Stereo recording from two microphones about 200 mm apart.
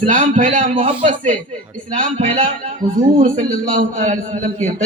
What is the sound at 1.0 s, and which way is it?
Speech, 40° right (ahead or behind).